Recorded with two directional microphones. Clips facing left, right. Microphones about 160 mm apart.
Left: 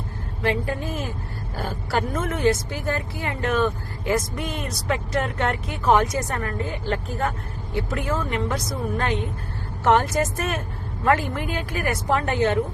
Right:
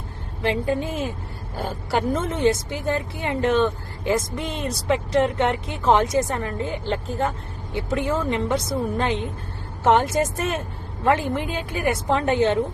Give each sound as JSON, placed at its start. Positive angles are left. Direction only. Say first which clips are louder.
{"t": 0.4, "sound": "speech", "louder": "right 2 dB", "side_deg": -25}